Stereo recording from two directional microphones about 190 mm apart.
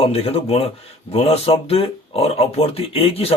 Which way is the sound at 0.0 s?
30° left (ahead or behind).